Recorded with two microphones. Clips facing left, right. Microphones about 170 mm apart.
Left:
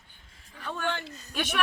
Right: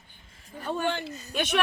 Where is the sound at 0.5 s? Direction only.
40° right (ahead or behind).